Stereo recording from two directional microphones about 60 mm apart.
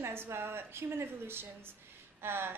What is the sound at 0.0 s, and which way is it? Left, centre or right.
A woman's voice, right.